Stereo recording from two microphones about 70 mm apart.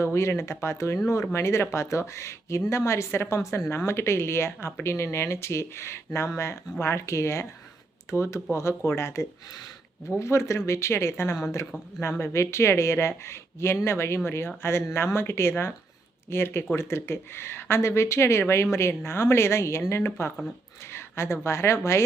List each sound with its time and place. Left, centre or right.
0.0 s speech: left
20.9 s a sound: left
21.4 s speech: left